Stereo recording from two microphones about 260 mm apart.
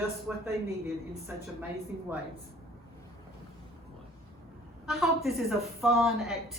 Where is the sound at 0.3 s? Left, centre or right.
Centre.